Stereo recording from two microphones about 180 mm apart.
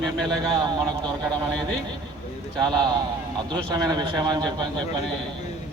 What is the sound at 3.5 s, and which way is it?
A man's voice, 20° right (ahead or behind).